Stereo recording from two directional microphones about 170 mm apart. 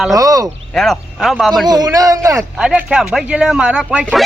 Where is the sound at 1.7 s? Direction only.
20° right (ahead or behind).